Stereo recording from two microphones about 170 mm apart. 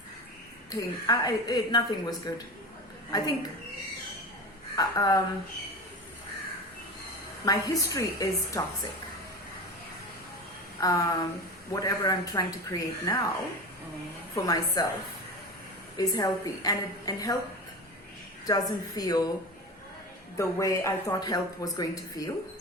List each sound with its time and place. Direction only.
0.7 s speech: 20° left (ahead or behind)
4.8 s speech: 20° left (ahead or behind)
7.4 s speech: 20° left (ahead or behind)
10.8 s speech: 20° left (ahead or behind)
14.3 s speech: 20° left (ahead or behind)
16.0 s speech: 20° left (ahead or behind)
18.4 s speech: 20° left (ahead or behind)
20.3 s speech: 20° left (ahead or behind)